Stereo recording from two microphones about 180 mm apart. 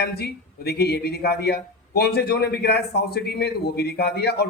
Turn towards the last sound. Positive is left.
turn(degrees=65)  # may be behind; listen again after turning